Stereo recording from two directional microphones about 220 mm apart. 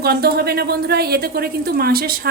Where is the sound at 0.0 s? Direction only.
45° right (ahead or behind).